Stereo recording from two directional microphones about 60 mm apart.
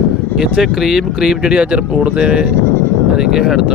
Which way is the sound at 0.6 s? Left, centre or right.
Centre.